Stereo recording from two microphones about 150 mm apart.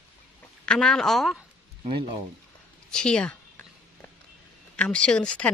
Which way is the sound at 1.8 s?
35° right (ahead or behind).